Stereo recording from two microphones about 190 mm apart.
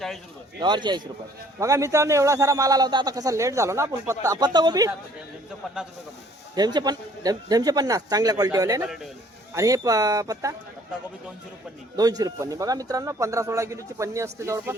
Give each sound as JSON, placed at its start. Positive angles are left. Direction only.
{"t": 0.6, "sound": "a man's voice", "side_deg": -25}
{"t": 5.6, "sound": "speech", "side_deg": 0}
{"t": 6.6, "sound": "a man's voice", "side_deg": -20}
{"t": 11.9, "sound": "a man's voice", "side_deg": -20}